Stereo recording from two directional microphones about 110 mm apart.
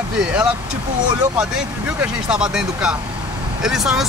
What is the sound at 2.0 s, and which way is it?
Speech, 5° right (ahead or behind).